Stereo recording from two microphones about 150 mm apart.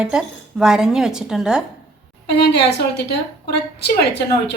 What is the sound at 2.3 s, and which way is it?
A woman's voice, 90° left.